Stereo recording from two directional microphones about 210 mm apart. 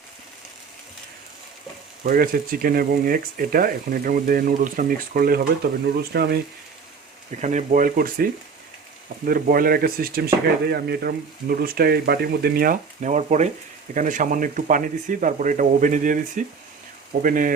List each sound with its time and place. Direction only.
2.0 s speech: 45° right (ahead or behind)
7.3 s speech: 35° right (ahead or behind)